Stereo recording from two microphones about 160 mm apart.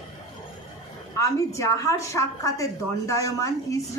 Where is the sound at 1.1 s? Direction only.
20° left (ahead or behind).